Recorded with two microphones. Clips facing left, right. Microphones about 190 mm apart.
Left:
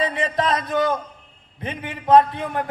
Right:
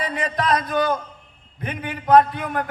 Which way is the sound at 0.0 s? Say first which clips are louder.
Left 2 dB; 25° left (ahead or behind).